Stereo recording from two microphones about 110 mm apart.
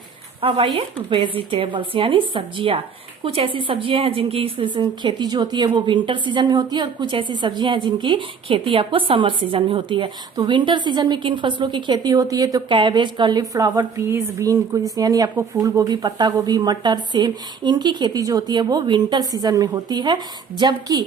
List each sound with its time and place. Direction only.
0.4 s a woman's voice: 55° right (ahead or behind); by 12.6 s 35° right (ahead or behind)
12.6 s a woman's voice: 45° right (ahead or behind)
13.5 s a woman's voice: 30° right (ahead or behind)